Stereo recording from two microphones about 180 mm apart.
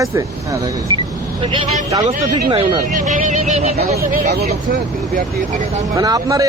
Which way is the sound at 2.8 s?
45° right (ahead or behind).